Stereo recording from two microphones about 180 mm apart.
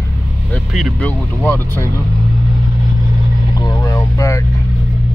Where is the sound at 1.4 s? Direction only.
10° left (ahead or behind).